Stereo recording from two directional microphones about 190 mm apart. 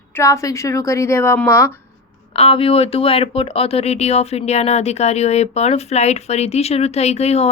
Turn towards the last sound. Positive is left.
turn(degrees=35)  # may be behind; listen again after turning